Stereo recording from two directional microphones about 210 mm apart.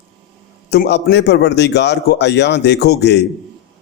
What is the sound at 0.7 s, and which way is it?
A man's voice, 55° left (ahead or behind).